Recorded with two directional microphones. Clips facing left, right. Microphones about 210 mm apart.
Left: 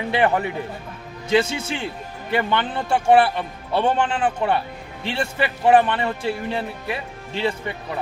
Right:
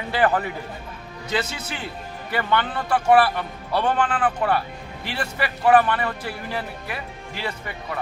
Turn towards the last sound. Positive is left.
turn(degrees=25)  # may be behind; listen again after turning